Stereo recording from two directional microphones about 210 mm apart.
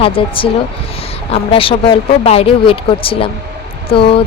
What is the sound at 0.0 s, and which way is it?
A woman's voice, 25° left (ahead or behind).